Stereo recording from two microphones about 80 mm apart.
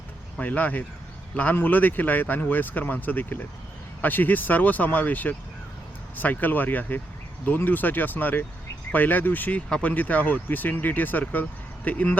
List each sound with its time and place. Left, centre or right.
0.3 s speech: centre